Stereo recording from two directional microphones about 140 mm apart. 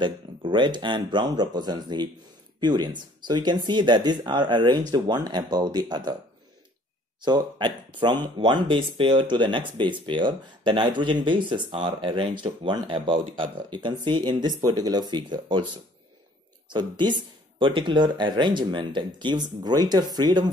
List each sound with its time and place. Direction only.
0.0 s speech: 35° right (ahead or behind)
7.2 s speech: 30° right (ahead or behind)
16.6 s speech: 30° right (ahead or behind)